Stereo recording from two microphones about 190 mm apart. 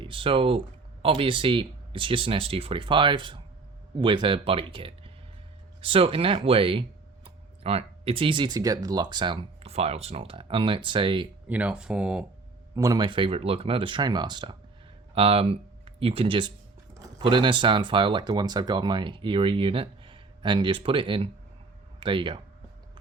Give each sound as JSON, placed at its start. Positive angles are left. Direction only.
{"t": 0.0, "sound": "speech", "side_deg": -30}
{"t": 11.4, "sound": "speech", "side_deg": -5}
{"t": 12.7, "sound": "speech", "side_deg": -20}